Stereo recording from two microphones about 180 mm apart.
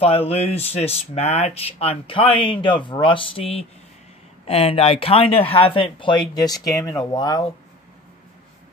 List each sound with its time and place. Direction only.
0.0 s speech: 35° left (ahead or behind)